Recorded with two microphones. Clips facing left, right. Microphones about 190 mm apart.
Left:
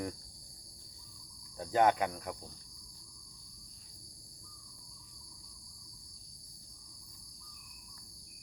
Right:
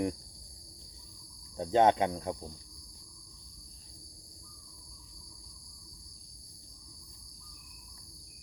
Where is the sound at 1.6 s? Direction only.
25° right (ahead or behind).